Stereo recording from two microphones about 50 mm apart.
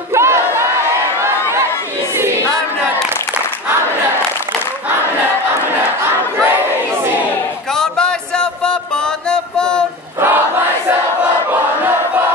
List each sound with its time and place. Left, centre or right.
0.1 s crowd: right
1.2 s a sound: right
2.1 s choir: right
6.0 s battle cry: right
7.7 s a sound: centre
9.3 s mantra: centre
11.5 s battle cry: right